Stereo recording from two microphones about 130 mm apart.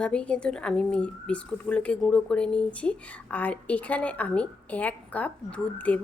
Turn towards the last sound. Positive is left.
turn(degrees=10)  # may be behind; listen again after turning